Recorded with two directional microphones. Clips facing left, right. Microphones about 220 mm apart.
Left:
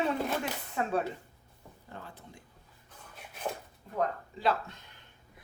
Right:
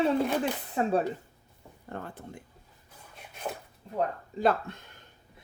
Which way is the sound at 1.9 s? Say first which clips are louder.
Right 8 dB; 55° right (ahead or behind).